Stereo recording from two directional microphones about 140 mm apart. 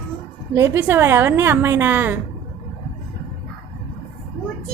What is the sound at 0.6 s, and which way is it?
A woman's voice, 15° right (ahead or behind).